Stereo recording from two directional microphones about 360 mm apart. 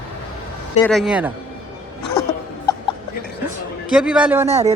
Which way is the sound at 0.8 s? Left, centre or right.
Centre.